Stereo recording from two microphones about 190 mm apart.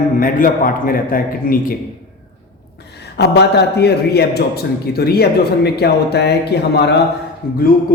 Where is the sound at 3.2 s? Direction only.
60° left (ahead or behind).